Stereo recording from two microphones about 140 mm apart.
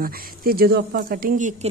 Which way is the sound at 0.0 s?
90° right.